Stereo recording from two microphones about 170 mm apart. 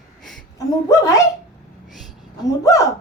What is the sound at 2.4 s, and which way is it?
Speech, 20° left (ahead or behind).